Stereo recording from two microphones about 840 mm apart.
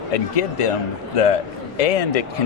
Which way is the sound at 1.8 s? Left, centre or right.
Left.